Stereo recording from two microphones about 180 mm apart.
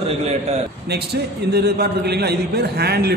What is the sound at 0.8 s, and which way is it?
A man's voice, 65° right (ahead or behind).